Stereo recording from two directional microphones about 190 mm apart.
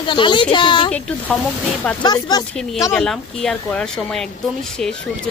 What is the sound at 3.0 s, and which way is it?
Speech, centre (ahead or behind).